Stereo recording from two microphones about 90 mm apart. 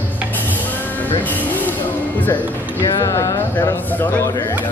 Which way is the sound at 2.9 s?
35° left (ahead or behind).